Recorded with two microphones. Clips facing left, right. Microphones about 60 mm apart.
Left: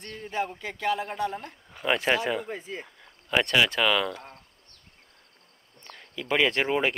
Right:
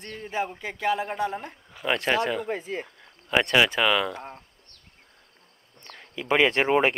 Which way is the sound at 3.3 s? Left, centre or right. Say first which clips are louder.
Right 2 dB; centre.